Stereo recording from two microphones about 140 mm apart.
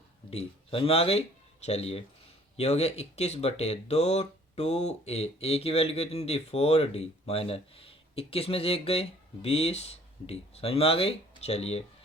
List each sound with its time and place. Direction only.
0.3 s speech: 45° left (ahead or behind)